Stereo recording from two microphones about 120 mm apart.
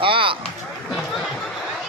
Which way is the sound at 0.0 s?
45° right (ahead or behind).